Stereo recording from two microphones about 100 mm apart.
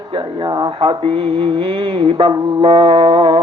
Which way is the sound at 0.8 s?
60° right (ahead or behind).